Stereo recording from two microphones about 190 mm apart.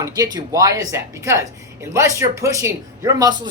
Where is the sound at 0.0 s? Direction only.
20° right (ahead or behind).